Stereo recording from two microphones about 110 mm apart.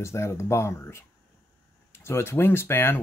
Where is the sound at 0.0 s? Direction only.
25° left (ahead or behind).